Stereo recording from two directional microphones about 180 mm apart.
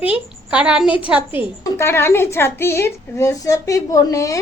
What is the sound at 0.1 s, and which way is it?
A woman's voice, 5° right (ahead or behind).